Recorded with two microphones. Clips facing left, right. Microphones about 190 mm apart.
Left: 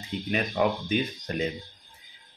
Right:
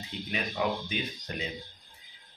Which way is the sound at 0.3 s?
50° left (ahead or behind).